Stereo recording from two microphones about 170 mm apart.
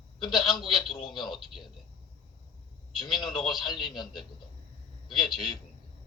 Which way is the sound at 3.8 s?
Centre (ahead or behind).